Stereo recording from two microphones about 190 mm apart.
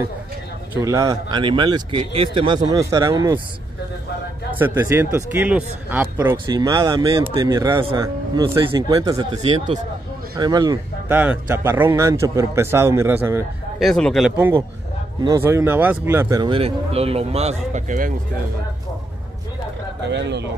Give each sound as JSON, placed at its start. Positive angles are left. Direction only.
{"t": 0.7, "sound": "speech", "side_deg": -15}
{"t": 4.6, "sound": "speech", "side_deg": -10}
{"t": 6.1, "sound": "speech", "side_deg": -20}
{"t": 11.1, "sound": "speech", "side_deg": -10}
{"t": 13.7, "sound": "speech", "side_deg": 5}
{"t": 20.1, "sound": "speech", "side_deg": -65}